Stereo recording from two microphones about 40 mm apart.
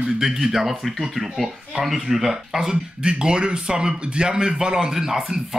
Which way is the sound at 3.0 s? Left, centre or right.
Right.